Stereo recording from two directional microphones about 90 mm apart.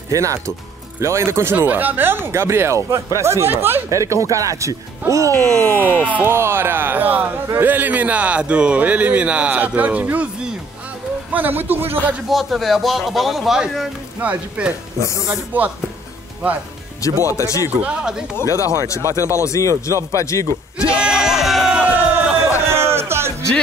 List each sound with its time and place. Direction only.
0.1 s speech: 35° right (ahead or behind)
4.0 s speech: 35° right (ahead or behind)
5.3 s speech: 10° left (ahead or behind)
6.2 s speech: 25° right (ahead or behind)
12.3 s a man's voice: centre (ahead or behind)
14.2 s speech: 15° right (ahead or behind)
17.0 s speech: 35° left (ahead or behind)
17.8 s speech: 5° right (ahead or behind)
18.3 s speech: 35° left (ahead or behind)
20.7 s a sound: 10° right (ahead or behind)
22.7 s music: 30° right (ahead or behind)